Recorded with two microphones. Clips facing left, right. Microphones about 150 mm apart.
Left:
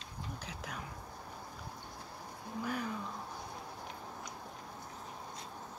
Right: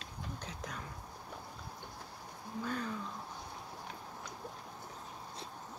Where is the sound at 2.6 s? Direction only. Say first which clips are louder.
Left 1 dB; 10° left (ahead or behind).